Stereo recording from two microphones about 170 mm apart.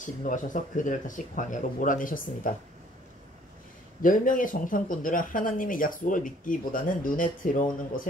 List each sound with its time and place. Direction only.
0.0 s speech: 50° left (ahead or behind)
4.0 s speech: 50° left (ahead or behind)